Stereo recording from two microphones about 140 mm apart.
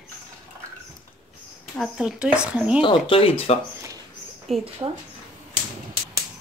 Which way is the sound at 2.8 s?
40° left (ahead or behind).